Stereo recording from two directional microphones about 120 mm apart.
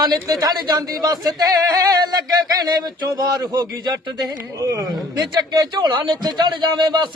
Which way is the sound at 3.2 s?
35° right (ahead or behind).